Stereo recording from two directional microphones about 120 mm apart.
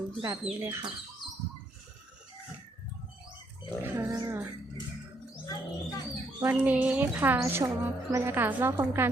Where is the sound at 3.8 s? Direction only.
20° right (ahead or behind).